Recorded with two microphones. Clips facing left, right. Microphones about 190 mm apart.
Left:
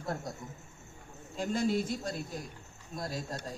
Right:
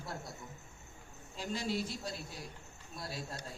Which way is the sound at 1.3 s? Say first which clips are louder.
Left 7 dB; 50° left (ahead or behind).